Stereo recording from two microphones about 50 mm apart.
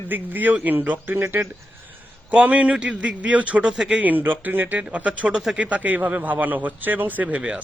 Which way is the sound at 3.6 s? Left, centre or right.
Centre.